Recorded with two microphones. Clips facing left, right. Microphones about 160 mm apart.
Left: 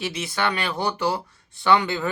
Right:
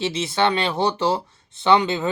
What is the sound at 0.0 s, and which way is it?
Speech, 25° right (ahead or behind).